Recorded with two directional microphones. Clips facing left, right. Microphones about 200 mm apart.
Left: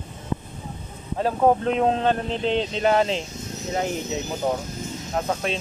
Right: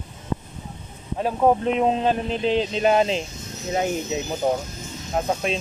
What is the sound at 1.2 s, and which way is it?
Speech, 5° right (ahead or behind).